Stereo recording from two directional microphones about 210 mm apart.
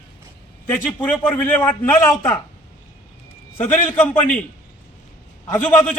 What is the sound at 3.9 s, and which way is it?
Speech, 5° left (ahead or behind).